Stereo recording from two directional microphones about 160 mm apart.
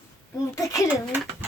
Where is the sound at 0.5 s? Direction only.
20° left (ahead or behind).